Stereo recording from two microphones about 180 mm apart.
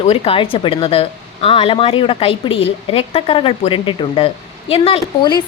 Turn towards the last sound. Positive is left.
turn(degrees=30)  # may be behind; listen again after turning